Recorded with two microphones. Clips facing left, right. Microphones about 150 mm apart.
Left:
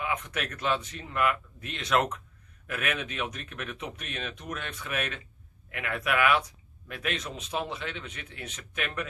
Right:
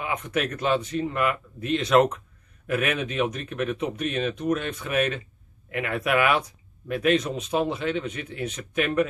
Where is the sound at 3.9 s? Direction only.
Centre (ahead or behind).